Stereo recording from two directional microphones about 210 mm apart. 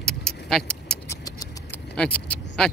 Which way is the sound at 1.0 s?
15° left (ahead or behind).